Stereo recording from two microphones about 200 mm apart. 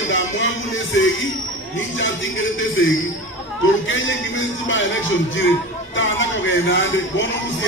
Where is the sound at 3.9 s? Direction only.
70° left (ahead or behind).